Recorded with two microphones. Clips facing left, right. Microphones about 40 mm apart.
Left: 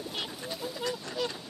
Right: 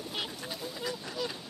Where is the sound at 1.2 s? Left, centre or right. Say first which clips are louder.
Left 3 dB; centre.